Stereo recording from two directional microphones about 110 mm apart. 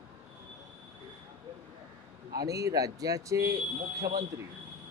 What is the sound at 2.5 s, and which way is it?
Speech, 30° right (ahead or behind).